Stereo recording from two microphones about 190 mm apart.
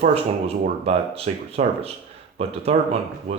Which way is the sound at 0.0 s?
35° right (ahead or behind).